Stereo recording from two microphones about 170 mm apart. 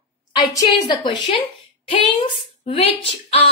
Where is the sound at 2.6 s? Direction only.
35° left (ahead or behind).